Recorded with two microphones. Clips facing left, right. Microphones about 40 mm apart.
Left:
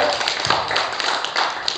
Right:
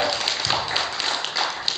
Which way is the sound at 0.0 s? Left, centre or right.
Centre.